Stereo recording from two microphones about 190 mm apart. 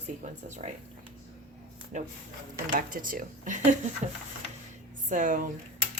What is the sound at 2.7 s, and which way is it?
Speech, 45° right (ahead or behind).